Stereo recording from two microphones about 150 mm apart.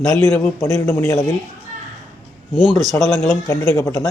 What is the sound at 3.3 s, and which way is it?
Speech, 15° left (ahead or behind).